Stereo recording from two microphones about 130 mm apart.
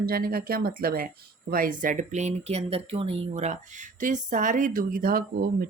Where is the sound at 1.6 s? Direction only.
90° right.